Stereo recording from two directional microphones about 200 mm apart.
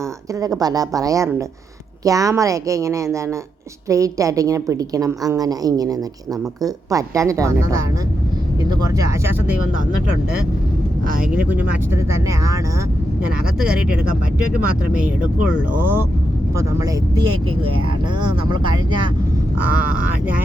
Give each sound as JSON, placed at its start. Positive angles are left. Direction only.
{"t": 0.3, "sound": "a woman's voice", "side_deg": -20}
{"t": 11.3, "sound": "a woman's voice", "side_deg": -10}